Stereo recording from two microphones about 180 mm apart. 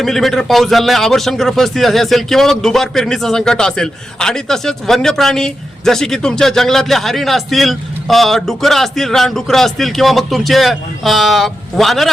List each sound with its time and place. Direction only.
0.0 s a man's voice: centre (ahead or behind)